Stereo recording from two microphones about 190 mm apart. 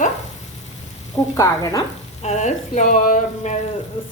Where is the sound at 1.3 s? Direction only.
20° left (ahead or behind).